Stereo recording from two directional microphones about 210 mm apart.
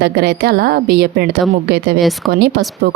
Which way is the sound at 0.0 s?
50° right (ahead or behind).